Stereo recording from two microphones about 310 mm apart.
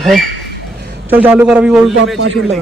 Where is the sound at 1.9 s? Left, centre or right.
Right.